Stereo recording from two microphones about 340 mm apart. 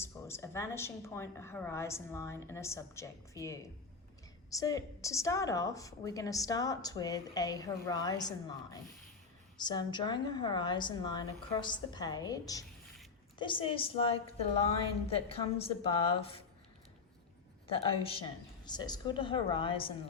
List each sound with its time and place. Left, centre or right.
0.0 s a woman's voice: centre
17.7 s a woman's voice: centre